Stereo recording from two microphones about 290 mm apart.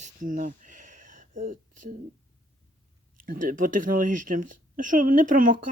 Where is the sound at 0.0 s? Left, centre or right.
Right.